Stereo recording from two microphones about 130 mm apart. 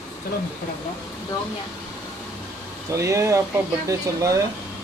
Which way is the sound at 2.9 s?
25° right (ahead or behind).